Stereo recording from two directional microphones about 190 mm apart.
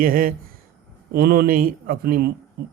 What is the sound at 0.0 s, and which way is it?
Speech, 50° right (ahead or behind).